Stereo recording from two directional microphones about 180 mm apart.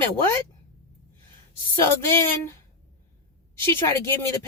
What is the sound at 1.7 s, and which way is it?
Speech, 15° left (ahead or behind).